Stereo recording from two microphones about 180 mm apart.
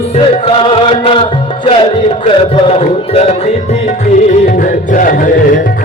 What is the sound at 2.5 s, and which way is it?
Music, 35° left (ahead or behind).